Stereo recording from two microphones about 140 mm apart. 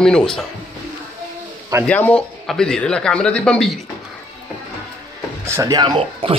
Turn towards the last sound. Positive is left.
turn(degrees=-35)  # may be behind; listen again after turning